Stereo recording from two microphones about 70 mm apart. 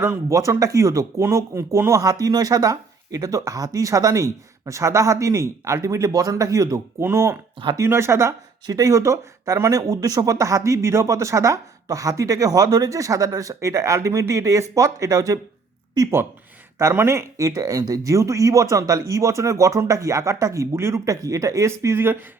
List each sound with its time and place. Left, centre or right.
0.3 s speech: right
2.2 s speech: right
7.0 s speech: right
8.6 s speech: right
16.0 s speech: right
16.7 s speech: right